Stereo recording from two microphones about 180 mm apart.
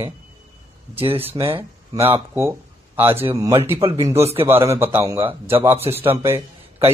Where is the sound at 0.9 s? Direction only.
30° right (ahead or behind).